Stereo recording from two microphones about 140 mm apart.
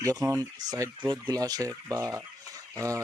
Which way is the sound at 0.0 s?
25° right (ahead or behind).